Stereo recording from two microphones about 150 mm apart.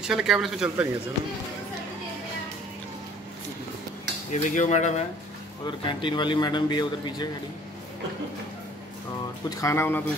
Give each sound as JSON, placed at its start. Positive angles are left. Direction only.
{"t": 0.0, "sound": "speech", "side_deg": -5}
{"t": 4.3, "sound": "cutlery", "side_deg": 55}
{"t": 5.7, "sound": "a man's voice", "side_deg": 35}
{"t": 9.5, "sound": "speech", "side_deg": 20}